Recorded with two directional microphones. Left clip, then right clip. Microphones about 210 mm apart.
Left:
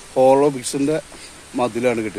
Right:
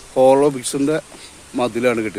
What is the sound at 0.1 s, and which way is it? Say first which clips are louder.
Speech: right 1 dB; 5° right (ahead or behind).